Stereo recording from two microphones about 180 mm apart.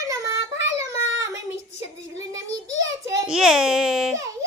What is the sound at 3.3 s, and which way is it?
Speech, 5° right (ahead or behind).